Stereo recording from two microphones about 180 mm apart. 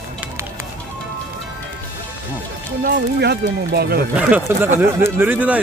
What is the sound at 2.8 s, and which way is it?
Speech, 65° right (ahead or behind).